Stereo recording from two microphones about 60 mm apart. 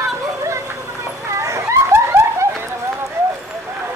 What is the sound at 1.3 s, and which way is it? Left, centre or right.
Snicker, right.